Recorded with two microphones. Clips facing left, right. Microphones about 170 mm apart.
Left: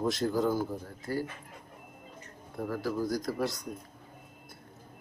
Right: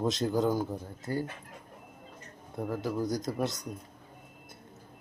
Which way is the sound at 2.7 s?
20° right (ahead or behind).